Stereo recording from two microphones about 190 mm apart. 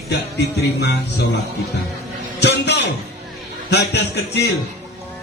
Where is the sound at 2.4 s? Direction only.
65° left (ahead or behind).